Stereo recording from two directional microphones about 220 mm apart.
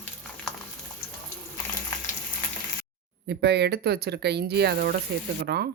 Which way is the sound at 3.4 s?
50° right (ahead or behind).